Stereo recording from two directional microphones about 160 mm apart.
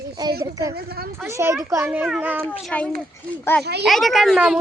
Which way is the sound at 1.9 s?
5° right (ahead or behind).